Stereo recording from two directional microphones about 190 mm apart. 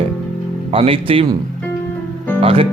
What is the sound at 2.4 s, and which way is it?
Speech, 30° right (ahead or behind).